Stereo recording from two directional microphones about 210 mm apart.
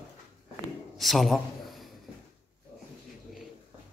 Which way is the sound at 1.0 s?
Centre (ahead or behind).